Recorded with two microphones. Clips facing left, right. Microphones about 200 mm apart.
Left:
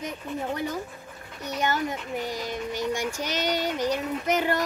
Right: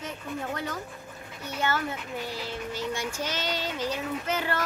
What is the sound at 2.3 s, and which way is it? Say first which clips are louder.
Child singing: left 3 dB; 15° left (ahead or behind).